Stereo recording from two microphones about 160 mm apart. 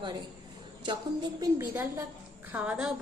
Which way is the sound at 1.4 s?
15° right (ahead or behind).